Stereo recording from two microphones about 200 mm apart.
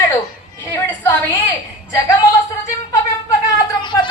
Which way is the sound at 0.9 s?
10° left (ahead or behind).